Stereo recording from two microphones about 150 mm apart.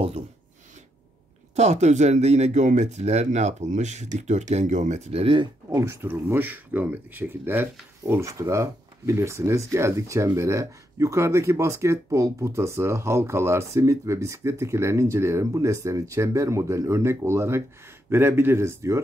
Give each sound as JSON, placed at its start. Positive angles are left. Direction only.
{"t": 1.5, "sound": "speech", "side_deg": -45}
{"t": 5.7, "sound": "speech", "side_deg": -20}